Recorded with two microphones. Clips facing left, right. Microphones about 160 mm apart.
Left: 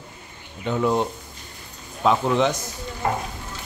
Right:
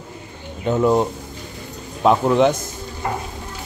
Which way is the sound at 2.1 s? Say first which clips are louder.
Right 5 dB; 50° right (ahead or behind).